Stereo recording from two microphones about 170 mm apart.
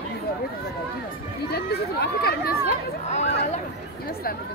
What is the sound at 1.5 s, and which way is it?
Speech, 70° left (ahead or behind).